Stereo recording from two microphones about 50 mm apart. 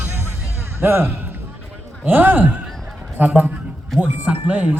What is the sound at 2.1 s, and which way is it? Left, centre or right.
Speech, right.